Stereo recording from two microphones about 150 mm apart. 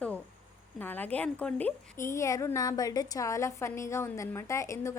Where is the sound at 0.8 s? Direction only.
10° left (ahead or behind).